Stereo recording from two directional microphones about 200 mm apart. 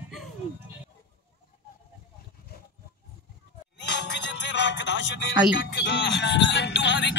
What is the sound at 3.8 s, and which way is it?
Speech, 60° left (ahead or behind).